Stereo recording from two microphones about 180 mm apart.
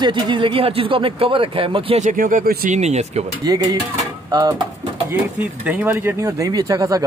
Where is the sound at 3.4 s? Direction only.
20° right (ahead or behind).